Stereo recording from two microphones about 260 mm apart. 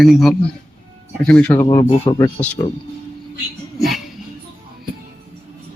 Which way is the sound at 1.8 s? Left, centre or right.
Centre.